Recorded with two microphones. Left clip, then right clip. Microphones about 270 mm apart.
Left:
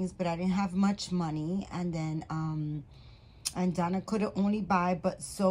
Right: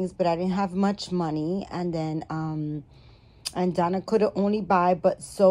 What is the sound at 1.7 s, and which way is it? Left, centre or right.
Speech, centre.